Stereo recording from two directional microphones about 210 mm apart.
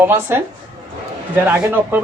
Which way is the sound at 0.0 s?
10° right (ahead or behind).